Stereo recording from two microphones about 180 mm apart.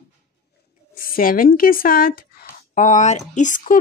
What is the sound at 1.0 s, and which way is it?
Speech, 50° left (ahead or behind).